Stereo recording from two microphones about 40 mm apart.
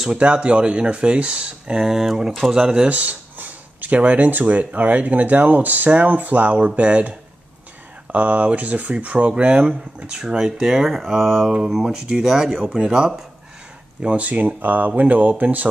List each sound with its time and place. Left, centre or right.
0.1 s speech: right
2.9 s speech: right
10.1 s speech: centre
11.7 s speech: centre
14.1 s speech: right